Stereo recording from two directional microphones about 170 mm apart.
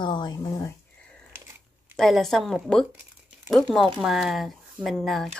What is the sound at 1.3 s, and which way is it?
Biting, 15° right (ahead or behind).